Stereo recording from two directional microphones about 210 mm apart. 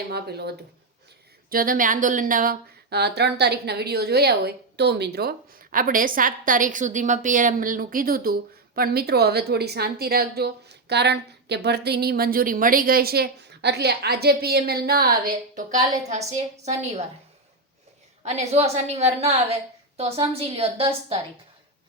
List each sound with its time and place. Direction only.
0.1 s speech: 50° right (ahead or behind)
16.0 s a woman's voice: 35° right (ahead or behind)
18.3 s a woman's voice: 30° right (ahead or behind)